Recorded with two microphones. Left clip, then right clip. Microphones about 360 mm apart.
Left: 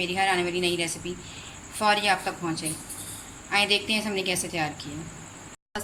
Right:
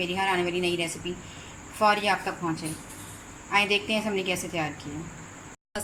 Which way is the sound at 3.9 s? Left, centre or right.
Centre.